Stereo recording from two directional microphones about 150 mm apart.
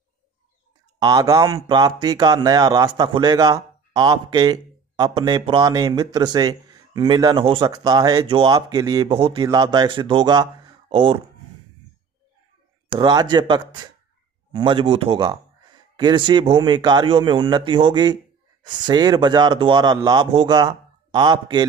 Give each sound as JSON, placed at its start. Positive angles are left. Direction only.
{"t": 0.9, "sound": "speech", "side_deg": -25}
{"t": 12.9, "sound": "speech", "side_deg": -30}